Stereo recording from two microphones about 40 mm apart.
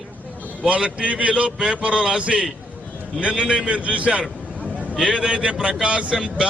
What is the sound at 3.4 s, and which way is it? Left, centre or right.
Speech, right.